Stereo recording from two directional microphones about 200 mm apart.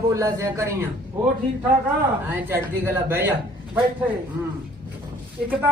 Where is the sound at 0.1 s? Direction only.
15° right (ahead or behind).